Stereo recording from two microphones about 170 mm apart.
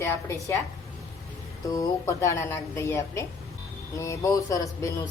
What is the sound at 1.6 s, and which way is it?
Speech, 20° left (ahead or behind).